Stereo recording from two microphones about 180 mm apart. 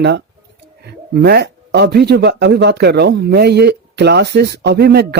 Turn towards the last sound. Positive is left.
turn(degrees=-65)  # may be behind; listen again after turning